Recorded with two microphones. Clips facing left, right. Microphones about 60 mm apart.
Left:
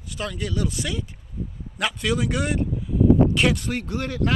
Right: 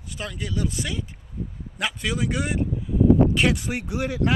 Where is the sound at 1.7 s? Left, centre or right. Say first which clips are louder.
Left 3 dB; right.